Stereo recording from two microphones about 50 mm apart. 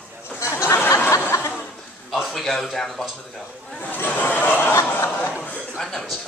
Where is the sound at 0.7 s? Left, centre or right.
Left.